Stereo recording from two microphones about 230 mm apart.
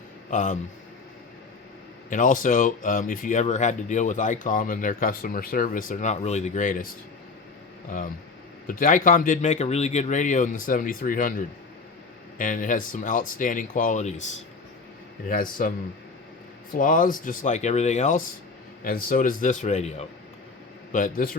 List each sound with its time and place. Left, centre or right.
0.3 s speech: left
2.0 s speech: left
8.6 s speech: left
15.3 s speech: left
16.7 s speech: left